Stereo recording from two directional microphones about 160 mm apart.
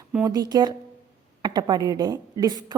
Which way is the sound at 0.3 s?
25° right (ahead or behind).